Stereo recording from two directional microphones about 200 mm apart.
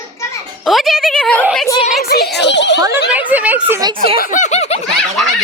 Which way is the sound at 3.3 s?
5° right (ahead or behind).